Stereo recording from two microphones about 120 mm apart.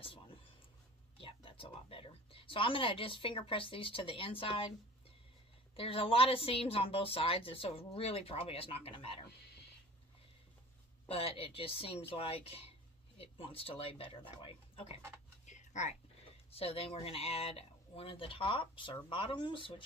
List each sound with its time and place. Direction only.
0.0 s whispering: 50° left (ahead or behind)
1.1 s a woman's voice: 50° left (ahead or behind)
5.8 s a woman's voice: 50° left (ahead or behind)
11.1 s a woman's voice: 50° left (ahead or behind)
15.4 s a sound: 80° left
16.5 s a woman's voice: 55° left (ahead or behind)